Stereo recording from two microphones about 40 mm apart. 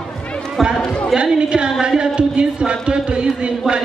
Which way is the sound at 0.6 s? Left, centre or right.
Centre.